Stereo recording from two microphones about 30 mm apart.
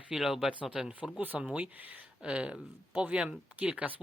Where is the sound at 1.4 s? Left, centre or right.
Right.